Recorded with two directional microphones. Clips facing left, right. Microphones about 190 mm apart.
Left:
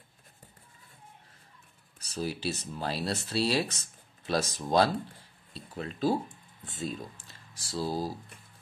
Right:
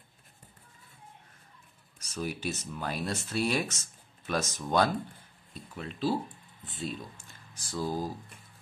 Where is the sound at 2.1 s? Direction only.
30° left (ahead or behind).